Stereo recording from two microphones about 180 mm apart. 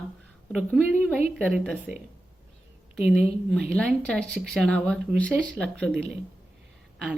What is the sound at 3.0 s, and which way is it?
A woman's voice, 5° right (ahead or behind).